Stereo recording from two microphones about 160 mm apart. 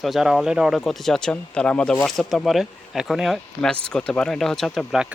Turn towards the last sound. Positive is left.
turn(degrees=0)  # may be behind; listen again after turning